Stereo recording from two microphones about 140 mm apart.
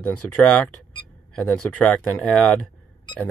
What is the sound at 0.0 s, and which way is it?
Speech, 10° left (ahead or behind).